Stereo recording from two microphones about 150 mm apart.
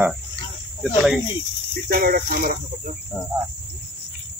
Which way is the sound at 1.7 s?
75° right (ahead or behind).